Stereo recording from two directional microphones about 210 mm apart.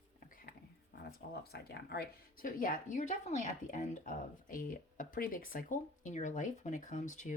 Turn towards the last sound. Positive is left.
turn(degrees=35)  # may be behind; listen again after turning